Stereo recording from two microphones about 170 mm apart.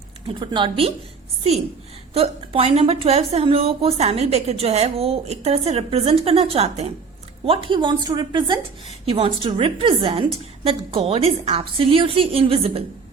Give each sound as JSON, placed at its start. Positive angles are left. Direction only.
{"t": 0.3, "sound": "a woman's voice", "side_deg": -30}
{"t": 2.1, "sound": "a woman's voice", "side_deg": -35}